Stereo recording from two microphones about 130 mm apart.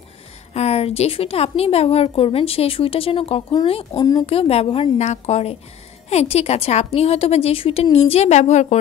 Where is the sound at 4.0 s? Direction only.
30° left (ahead or behind).